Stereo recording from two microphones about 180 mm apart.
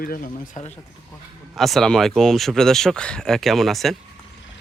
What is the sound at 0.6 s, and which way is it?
Speech, 35° left (ahead or behind).